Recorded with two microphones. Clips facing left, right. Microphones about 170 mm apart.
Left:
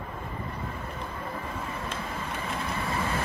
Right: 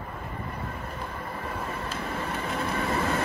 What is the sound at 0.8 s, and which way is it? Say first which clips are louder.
Train: right 1 dB; 10° right (ahead or behind).